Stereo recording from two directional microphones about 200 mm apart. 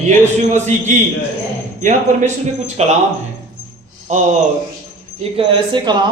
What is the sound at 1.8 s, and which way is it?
Speech, 40° right (ahead or behind).